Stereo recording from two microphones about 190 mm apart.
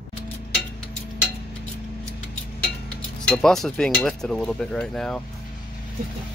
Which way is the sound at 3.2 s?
5° left (ahead or behind).